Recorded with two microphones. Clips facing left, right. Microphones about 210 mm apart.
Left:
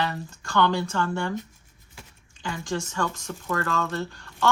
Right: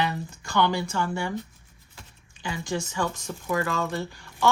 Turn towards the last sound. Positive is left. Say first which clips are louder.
# right 1 dB
turn(degrees=-15)  # may be behind; listen again after turning